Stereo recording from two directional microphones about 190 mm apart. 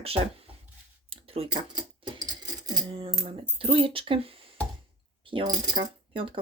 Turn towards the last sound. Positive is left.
turn(degrees=-25)  # may be behind; listen again after turning